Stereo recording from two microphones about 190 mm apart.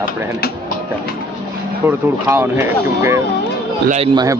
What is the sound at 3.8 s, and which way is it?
Speech, 35° right (ahead or behind).